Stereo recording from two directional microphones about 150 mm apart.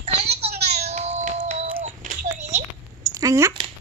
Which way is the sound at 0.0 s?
45° right (ahead or behind).